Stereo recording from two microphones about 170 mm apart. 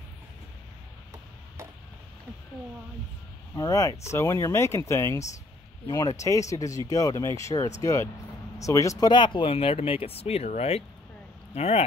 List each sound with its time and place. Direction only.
3.5 s speech: 20° left (ahead or behind); by 11.8 s 40° left (ahead or behind)